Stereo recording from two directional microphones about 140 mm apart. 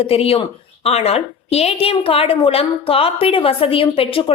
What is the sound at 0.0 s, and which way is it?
A woman's voice, 45° left (ahead or behind).